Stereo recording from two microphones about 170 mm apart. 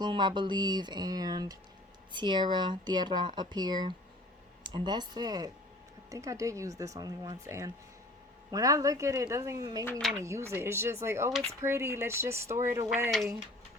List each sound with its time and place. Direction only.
0.0 s speech: 25° right (ahead or behind)